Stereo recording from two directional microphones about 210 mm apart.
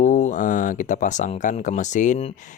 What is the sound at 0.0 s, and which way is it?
Speech, 35° left (ahead or behind).